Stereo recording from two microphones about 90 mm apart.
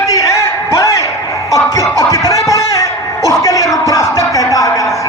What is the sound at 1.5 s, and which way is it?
Music, 35° left (ahead or behind).